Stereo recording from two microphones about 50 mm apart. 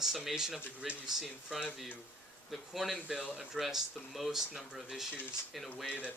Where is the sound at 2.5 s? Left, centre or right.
Centre.